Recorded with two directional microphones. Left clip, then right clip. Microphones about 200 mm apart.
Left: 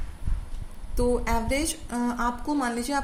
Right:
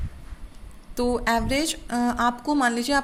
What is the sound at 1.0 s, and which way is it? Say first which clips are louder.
A woman's voice: right 2 dB; 40° right (ahead or behind).